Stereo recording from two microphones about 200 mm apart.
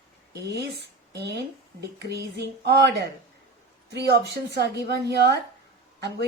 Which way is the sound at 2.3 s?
55° right (ahead or behind).